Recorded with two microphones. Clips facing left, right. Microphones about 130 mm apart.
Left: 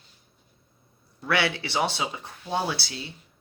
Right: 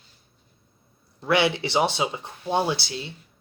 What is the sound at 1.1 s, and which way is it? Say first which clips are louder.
Speech: right 4 dB; 20° right (ahead or behind).